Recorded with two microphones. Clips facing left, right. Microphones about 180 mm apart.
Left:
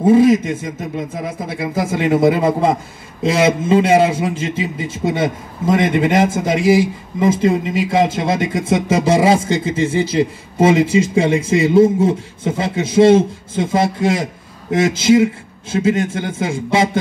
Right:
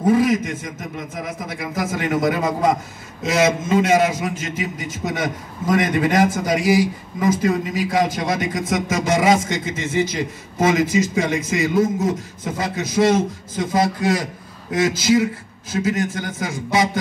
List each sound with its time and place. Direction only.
0.0 s a man's voice: 25° left (ahead or behind)